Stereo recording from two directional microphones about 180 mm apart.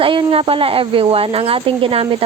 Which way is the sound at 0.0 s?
30° right (ahead or behind).